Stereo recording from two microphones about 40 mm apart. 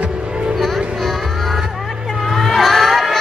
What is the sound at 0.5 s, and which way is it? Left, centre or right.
Music, centre.